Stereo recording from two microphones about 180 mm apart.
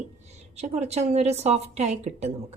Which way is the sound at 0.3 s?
40° right (ahead or behind).